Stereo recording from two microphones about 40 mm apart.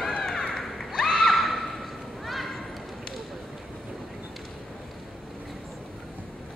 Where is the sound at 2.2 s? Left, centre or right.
Centre.